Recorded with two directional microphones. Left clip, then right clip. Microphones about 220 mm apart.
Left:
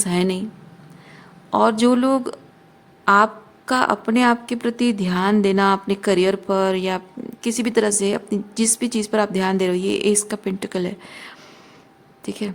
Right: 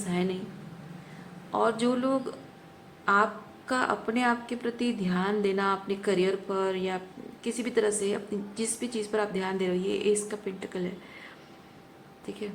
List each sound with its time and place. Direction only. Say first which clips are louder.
0.0 s a woman's voice: left 10 dB; 55° left (ahead or behind)
1.5 s a woman's voice: left 10 dB; 55° left (ahead or behind)
3.7 s a woman's voice: left 9 dB; 50° left (ahead or behind)